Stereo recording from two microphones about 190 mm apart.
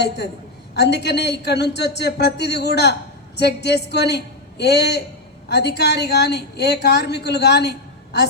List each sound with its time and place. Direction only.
0.7 s a woman's voice: 60° left (ahead or behind)